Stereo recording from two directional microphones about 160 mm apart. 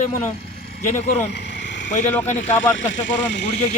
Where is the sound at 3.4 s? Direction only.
40° left (ahead or behind).